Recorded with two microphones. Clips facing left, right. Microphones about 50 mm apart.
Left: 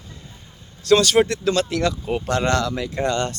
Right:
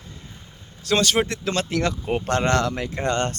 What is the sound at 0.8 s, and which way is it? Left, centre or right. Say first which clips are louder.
Speech: left 5 dB; centre.